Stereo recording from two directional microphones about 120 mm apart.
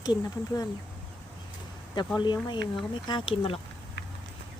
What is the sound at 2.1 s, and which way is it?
Speech, 40° left (ahead or behind).